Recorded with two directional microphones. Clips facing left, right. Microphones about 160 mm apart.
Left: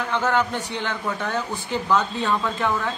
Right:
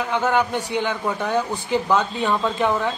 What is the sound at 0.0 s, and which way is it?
Speech, 15° right (ahead or behind).